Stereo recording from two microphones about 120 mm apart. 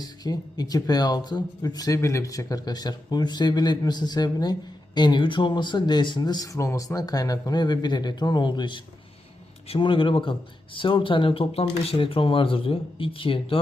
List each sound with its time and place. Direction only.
0.0 s speech: 35° left (ahead or behind)